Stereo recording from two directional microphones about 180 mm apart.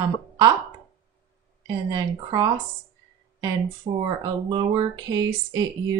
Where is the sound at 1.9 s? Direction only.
20° right (ahead or behind).